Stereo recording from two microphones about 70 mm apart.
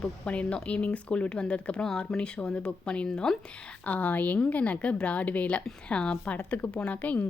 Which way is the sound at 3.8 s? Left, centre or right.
Left.